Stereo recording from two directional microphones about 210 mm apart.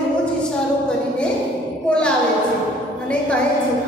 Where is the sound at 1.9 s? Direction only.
5° left (ahead or behind).